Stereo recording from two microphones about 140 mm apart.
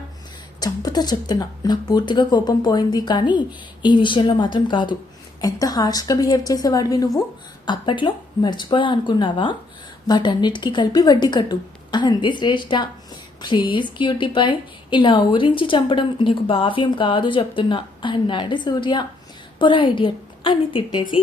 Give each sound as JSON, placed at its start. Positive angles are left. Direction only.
{"t": 0.6, "sound": "a woman's voice", "side_deg": 30}